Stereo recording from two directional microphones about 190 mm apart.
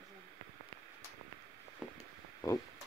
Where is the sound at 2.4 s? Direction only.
20° left (ahead or behind).